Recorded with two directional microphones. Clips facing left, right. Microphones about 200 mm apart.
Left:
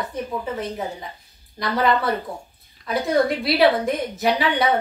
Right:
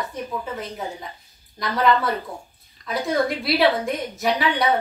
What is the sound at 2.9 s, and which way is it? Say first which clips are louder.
A woman's voice: left 3 dB; centre (ahead or behind).